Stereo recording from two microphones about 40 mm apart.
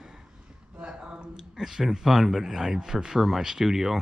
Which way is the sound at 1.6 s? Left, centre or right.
Centre.